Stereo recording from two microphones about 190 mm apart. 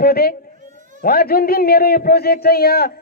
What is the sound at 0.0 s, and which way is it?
A man's voice, 55° left (ahead or behind).